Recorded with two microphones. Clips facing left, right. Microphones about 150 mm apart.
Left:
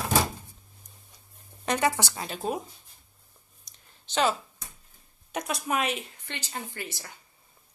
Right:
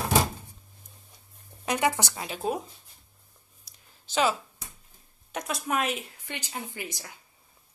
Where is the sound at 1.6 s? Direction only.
5° right (ahead or behind).